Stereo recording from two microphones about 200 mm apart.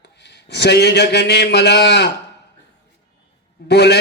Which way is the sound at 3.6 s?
55° left (ahead or behind).